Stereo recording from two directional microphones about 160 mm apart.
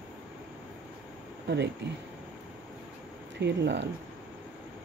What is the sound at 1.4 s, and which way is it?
Speech, 90° right.